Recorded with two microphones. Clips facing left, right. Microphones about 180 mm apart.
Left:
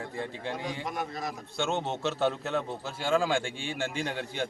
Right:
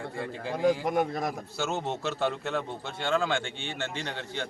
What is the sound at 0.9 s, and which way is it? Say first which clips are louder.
Speech: right 7 dB; 55° right (ahead or behind).